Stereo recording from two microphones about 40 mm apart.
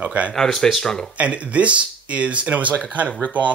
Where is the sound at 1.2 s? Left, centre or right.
Right.